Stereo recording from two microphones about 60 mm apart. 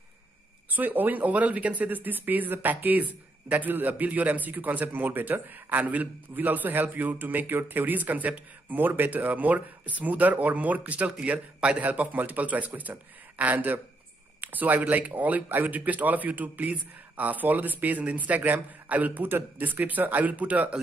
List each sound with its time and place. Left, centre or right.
0.7 s speech: right